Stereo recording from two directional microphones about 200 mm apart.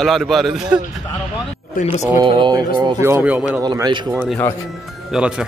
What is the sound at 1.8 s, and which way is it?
Speech, 35° left (ahead or behind).